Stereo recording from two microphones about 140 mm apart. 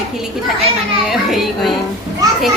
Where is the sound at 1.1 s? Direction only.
Centre (ahead or behind).